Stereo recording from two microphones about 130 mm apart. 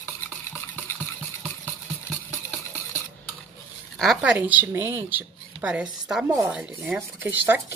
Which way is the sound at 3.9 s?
Centre (ahead or behind).